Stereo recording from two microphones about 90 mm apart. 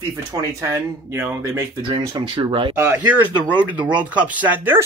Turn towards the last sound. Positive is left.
turn(degrees=-15)  # may be behind; listen again after turning